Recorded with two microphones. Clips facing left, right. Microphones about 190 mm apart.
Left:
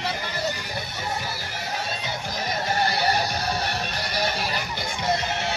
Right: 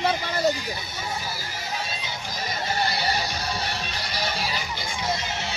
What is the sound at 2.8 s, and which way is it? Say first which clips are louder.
Music: left 3 dB; 55° left (ahead or behind).